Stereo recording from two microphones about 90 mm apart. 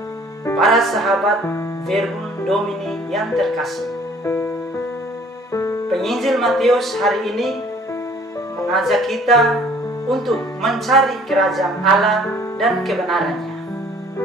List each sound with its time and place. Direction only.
0.6 s speech: centre (ahead or behind)
3.1 s speech: centre (ahead or behind)
4.3 s music: 25° left (ahead or behind)
5.9 s speech: centre (ahead or behind)
8.7 s speech: centre (ahead or behind)